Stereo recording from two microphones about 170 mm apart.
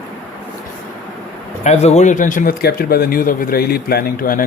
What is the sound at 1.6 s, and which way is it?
Speech, 40° left (ahead or behind).